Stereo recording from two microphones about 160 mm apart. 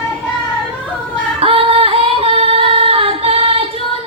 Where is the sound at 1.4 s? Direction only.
35° right (ahead or behind).